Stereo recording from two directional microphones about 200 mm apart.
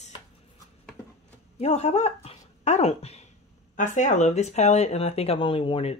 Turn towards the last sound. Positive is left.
turn(degrees=30)  # may be behind; listen again after turning